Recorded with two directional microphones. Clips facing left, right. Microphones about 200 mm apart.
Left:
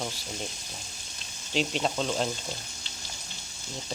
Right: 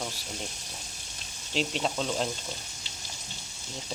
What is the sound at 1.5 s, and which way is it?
Speech, centre (ahead or behind).